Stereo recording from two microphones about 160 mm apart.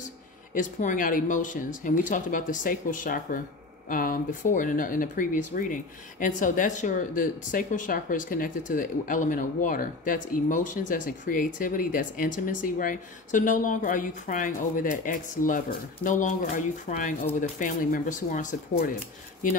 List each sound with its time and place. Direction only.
0.6 s speech: 55° left (ahead or behind)